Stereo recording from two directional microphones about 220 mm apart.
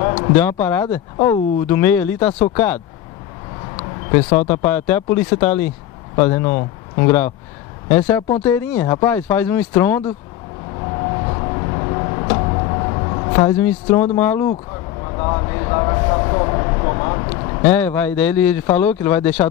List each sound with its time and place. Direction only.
0.0 s a sound: 20° left (ahead or behind)
0.4 s speech: 10° left (ahead or behind)
4.1 s speech: 10° left (ahead or behind)
8.1 s speech: 15° left (ahead or behind)
10.8 s a sound: 25° left (ahead or behind)
13.5 s speech: 10° left (ahead or behind)
15.0 s vehicle: 20° left (ahead or behind)
17.6 s speech: 10° left (ahead or behind)